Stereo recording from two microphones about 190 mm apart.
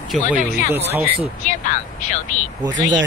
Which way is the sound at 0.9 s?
10° right (ahead or behind).